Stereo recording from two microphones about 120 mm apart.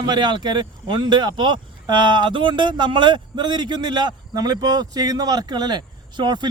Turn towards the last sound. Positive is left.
turn(degrees=-40)  # may be behind; listen again after turning